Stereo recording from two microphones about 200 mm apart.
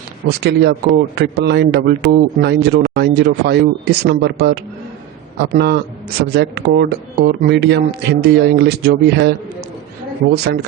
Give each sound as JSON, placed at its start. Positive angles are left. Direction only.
{"t": 0.3, "sound": "a man's voice", "side_deg": -55}
{"t": 10.3, "sound": "speech", "side_deg": -55}